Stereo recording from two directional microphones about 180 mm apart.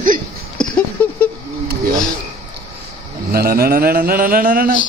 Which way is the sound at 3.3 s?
55° right (ahead or behind).